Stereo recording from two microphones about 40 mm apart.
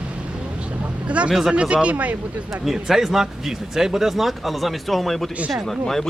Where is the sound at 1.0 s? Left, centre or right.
Right.